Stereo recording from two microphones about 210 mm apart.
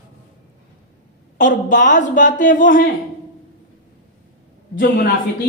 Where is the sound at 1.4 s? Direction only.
40° left (ahead or behind).